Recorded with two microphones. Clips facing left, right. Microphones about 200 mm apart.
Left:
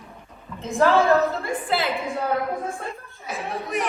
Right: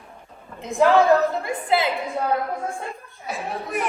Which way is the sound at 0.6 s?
15° right (ahead or behind).